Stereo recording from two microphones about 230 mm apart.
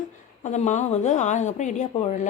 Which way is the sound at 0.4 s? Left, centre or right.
Left.